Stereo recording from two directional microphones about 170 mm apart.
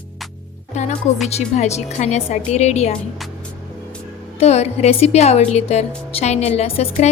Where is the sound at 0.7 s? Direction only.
40° left (ahead or behind).